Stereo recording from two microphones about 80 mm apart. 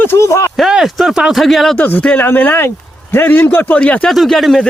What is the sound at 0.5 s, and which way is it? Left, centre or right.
Speech, centre.